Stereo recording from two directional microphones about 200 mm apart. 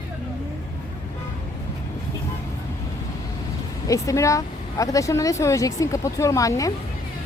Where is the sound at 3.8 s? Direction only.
15° left (ahead or behind).